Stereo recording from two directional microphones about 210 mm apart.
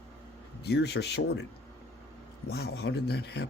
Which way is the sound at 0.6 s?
55° left (ahead or behind).